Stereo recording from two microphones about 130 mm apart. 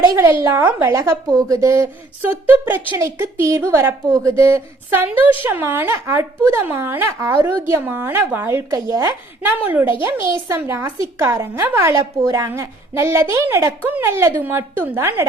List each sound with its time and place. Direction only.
0.2 s a woman's voice: 20° right (ahead or behind)
9.4 s a woman's voice: 15° right (ahead or behind)